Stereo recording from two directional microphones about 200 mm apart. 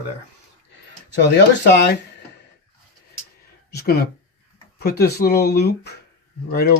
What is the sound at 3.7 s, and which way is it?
Speech, 55° left (ahead or behind).